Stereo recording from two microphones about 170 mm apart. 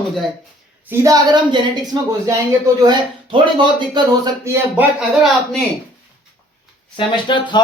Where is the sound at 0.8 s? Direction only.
20° right (ahead or behind).